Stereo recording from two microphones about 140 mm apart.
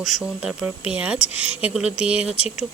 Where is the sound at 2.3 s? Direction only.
50° left (ahead or behind).